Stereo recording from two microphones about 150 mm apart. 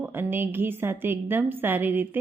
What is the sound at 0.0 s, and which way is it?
A woman's voice, 15° right (ahead or behind).